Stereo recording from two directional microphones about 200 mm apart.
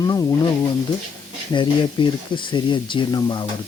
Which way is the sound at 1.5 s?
25° left (ahead or behind).